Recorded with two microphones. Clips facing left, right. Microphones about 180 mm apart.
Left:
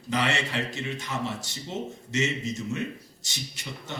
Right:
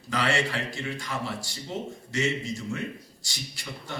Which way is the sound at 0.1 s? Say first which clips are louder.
Even; 20° left (ahead or behind).